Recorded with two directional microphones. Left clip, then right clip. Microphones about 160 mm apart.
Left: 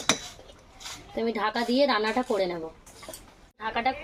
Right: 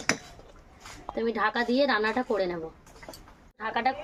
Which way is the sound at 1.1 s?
10° left (ahead or behind).